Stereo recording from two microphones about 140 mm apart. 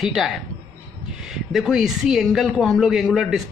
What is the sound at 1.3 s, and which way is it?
Speech, centre (ahead or behind).